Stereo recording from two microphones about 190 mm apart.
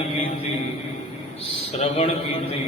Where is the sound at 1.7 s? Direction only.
35° left (ahead or behind).